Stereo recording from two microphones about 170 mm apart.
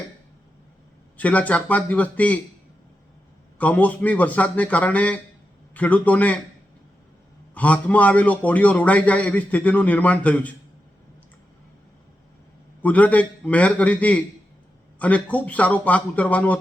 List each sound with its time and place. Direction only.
1.1 s a man's voice: 10° left (ahead or behind)
3.6 s a man's voice: 10° left (ahead or behind)
7.5 s a man's voice: 10° left (ahead or behind)
12.8 s a man's voice: 10° left (ahead or behind)